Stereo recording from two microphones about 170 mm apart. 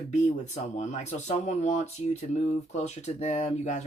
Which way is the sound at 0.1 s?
40° left (ahead or behind).